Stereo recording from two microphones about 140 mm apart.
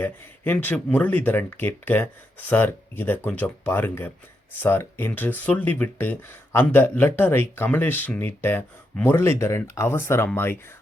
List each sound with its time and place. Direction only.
0.0 s speech: 15° left (ahead or behind)